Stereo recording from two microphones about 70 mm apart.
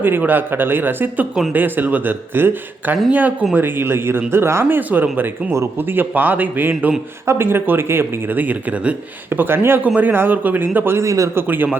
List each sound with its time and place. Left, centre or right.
0.0 s speech: right
4.8 s speech: right
9.3 s speech: right
11.0 s a man's voice: right
11.3 s speech: right